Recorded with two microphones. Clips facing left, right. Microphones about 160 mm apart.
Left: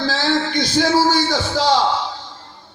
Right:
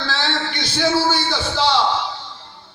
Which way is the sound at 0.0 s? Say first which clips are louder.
Left 5 dB; 40° left (ahead or behind).